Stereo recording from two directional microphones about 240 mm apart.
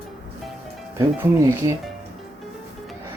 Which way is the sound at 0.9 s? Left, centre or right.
Centre.